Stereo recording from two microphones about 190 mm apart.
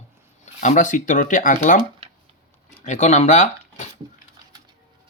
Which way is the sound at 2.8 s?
35° left (ahead or behind).